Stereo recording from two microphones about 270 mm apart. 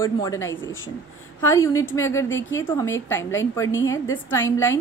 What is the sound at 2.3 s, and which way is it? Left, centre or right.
Speech, left.